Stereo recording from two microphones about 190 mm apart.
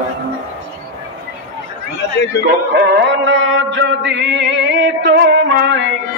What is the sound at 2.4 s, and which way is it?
Music, 70° right (ahead or behind).